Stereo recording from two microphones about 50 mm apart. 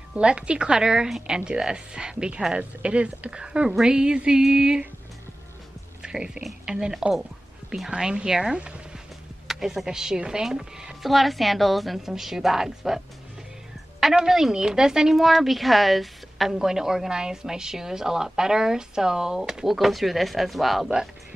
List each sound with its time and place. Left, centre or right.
0.1 s a woman's voice: right
6.0 s a woman's voice: centre
9.5 s a woman's voice: centre
11.0 s a woman's voice: centre
14.1 s a woman's voice: centre
15.1 s a woman's voice: centre